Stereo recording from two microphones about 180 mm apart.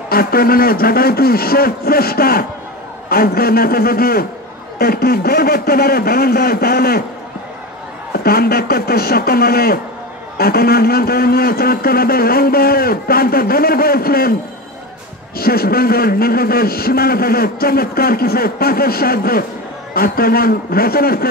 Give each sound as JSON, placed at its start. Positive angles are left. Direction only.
{"t": 0.1, "sound": "a man's voice", "side_deg": 55}
{"t": 8.2, "sound": "a man's voice", "side_deg": 60}
{"t": 15.3, "sound": "a man's voice", "side_deg": 55}